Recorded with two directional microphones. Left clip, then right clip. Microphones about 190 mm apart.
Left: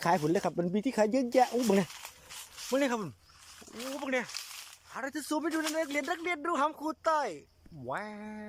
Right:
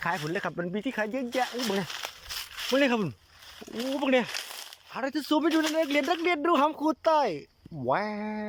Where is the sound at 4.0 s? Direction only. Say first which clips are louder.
Right 8 dB; 15° right (ahead or behind).